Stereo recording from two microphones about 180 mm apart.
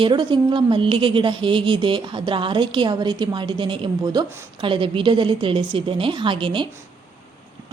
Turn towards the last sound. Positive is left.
turn(degrees=-25)  # may be behind; listen again after turning